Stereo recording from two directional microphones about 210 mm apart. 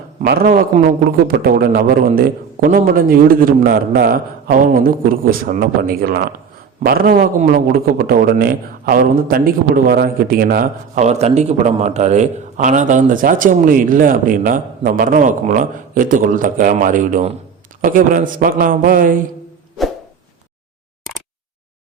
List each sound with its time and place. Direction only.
0.2 s a man's voice: 45° right (ahead or behind)